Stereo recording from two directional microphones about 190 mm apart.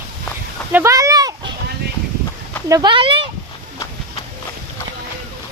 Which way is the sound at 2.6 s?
20° right (ahead or behind).